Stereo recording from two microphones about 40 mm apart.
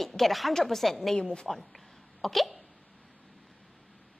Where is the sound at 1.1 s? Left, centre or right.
Left.